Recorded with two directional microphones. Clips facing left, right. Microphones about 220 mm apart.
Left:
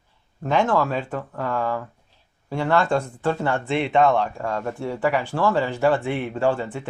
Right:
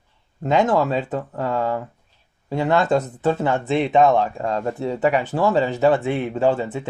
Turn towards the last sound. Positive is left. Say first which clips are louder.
# right 3 dB
turn(degrees=-20)  # may be behind; listen again after turning